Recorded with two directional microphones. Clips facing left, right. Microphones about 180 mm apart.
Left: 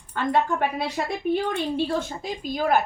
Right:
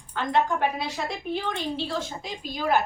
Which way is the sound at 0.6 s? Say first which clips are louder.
Left 1 dB; 55° left (ahead or behind).